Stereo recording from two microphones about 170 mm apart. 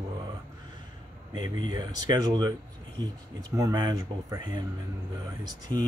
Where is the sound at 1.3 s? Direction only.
25° right (ahead or behind).